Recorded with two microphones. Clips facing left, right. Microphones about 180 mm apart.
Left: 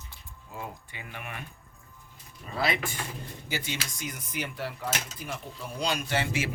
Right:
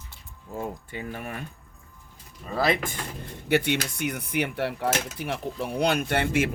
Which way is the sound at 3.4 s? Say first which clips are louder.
Right 12 dB; 65° right (ahead or behind).